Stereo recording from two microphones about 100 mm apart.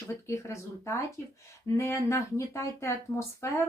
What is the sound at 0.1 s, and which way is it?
Speech, 25° left (ahead or behind).